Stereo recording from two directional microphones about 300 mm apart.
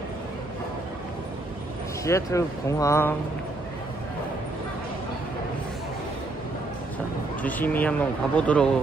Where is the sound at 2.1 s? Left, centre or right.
Centre.